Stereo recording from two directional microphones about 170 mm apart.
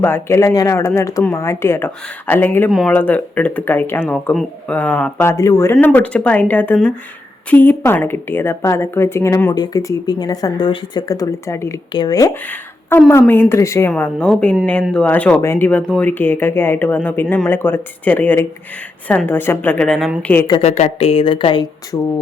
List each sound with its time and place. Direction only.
0.0 s a woman's voice: 15° left (ahead or behind)
2.6 s a woman's voice: centre (ahead or behind)
13.9 s a woman's voice: 5° left (ahead or behind)
20.6 s a woman's voice: 40° left (ahead or behind); by 22.1 s 20° left (ahead or behind)